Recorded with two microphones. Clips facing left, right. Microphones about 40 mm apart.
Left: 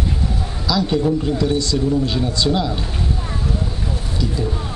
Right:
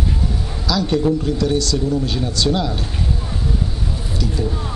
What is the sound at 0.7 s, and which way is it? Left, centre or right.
Speech, centre.